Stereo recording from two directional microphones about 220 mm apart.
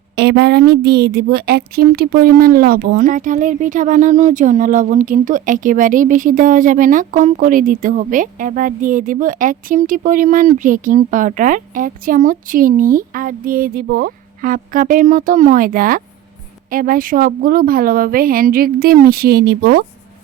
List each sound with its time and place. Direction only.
0.2 s a woman's voice: 50° right (ahead or behind)